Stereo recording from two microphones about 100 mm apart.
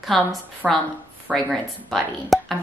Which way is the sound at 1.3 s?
5° left (ahead or behind).